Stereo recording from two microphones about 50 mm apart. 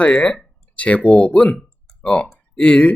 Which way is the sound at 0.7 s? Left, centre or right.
Left.